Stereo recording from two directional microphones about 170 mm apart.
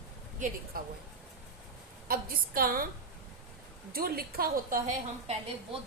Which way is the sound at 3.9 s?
60° right (ahead or behind).